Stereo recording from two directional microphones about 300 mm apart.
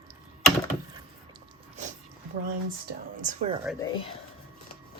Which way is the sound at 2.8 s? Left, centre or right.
Right.